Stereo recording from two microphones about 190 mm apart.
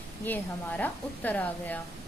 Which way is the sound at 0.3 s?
10° left (ahead or behind).